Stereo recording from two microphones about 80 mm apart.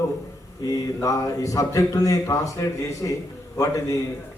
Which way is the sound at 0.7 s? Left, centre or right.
Left.